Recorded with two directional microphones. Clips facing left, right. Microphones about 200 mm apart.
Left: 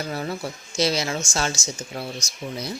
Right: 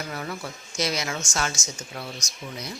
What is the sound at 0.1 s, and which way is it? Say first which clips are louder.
Speech: left 4 dB; 30° left (ahead or behind).